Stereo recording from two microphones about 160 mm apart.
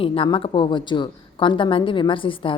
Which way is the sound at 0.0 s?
35° left (ahead or behind).